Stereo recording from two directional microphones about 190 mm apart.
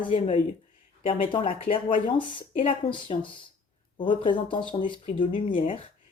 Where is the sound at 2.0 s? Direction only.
25° left (ahead or behind).